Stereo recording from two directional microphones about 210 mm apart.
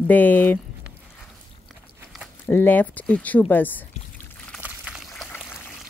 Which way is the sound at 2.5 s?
10° left (ahead or behind).